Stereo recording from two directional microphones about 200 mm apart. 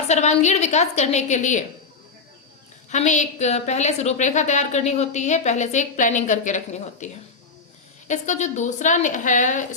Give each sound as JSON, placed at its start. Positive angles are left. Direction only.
{"t": 0.1, "sound": "a woman's voice", "side_deg": 35}
{"t": 2.9, "sound": "a woman's voice", "side_deg": 35}